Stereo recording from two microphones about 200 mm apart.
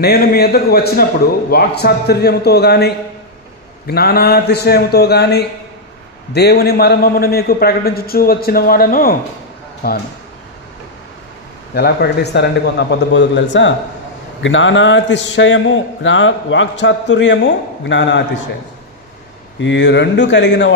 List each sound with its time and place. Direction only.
0.0 s a man's voice: 50° left (ahead or behind)
11.7 s a man's voice: 55° left (ahead or behind)
19.6 s a man's voice: 65° left (ahead or behind)